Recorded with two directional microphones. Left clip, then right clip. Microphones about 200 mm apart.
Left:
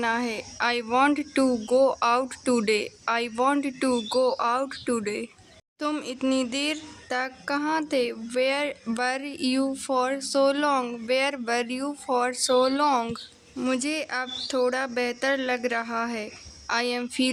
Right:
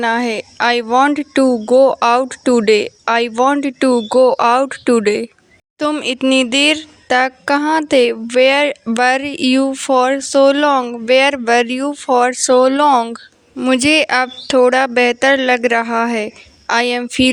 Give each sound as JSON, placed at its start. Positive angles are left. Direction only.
{"t": 0.0, "sound": "speech", "side_deg": -35}